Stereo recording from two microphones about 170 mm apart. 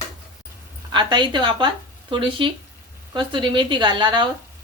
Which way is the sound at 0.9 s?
25° right (ahead or behind).